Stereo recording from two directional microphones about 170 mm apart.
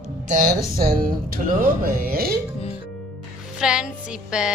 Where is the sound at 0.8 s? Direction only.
60° right (ahead or behind).